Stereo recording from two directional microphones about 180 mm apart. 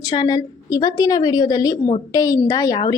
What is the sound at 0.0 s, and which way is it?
A woman's voice, 20° left (ahead or behind).